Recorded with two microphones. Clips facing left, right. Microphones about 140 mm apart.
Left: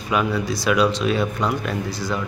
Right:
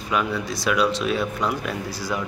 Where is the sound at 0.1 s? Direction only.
Centre (ahead or behind).